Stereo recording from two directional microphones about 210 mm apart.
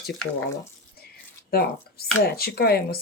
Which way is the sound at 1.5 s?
45° left (ahead or behind).